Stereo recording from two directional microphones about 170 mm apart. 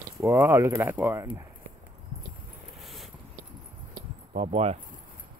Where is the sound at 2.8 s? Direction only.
Centre (ahead or behind).